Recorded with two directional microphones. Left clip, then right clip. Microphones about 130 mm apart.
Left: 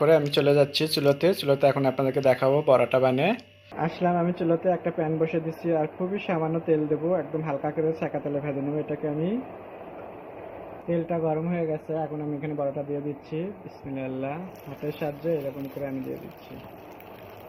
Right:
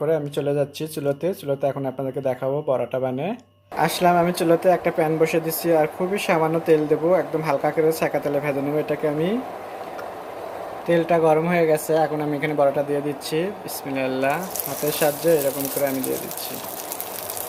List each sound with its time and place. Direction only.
0.0 s speech: 5° right (ahead or behind)
3.8 s speech: 30° right (ahead or behind)
10.8 s speech: 35° right (ahead or behind)